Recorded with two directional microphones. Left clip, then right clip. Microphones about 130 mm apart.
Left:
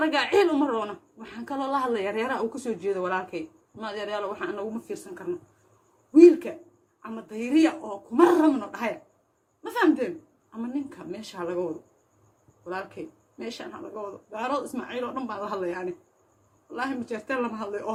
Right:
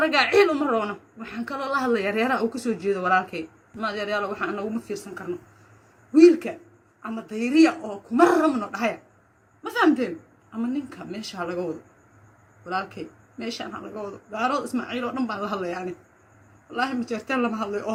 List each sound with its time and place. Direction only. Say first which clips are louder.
0.0 s a woman's voice: right 3 dB; 25° left (ahead or behind)
12.6 s speech: right 5 dB; 20° left (ahead or behind)
14.3 s a woman's voice: right 4 dB; 20° left (ahead or behind)